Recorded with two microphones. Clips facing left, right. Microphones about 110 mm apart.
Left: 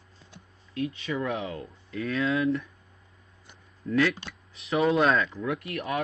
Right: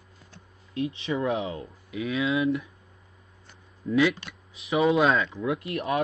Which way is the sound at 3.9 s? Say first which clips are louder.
Right 2 dB; 5° right (ahead or behind).